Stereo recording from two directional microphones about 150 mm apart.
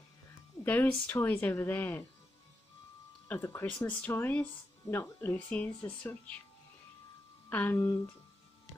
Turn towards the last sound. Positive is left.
turn(degrees=15)  # may be behind; listen again after turning